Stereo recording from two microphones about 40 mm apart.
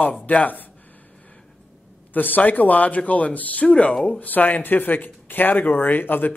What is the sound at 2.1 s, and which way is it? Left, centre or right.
A man's voice, left.